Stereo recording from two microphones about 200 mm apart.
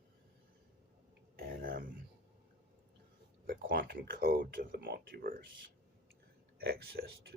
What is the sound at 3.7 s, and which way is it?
Speech, 45° right (ahead or behind).